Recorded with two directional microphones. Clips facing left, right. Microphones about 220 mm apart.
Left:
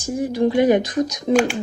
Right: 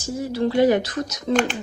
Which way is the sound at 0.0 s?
15° left (ahead or behind).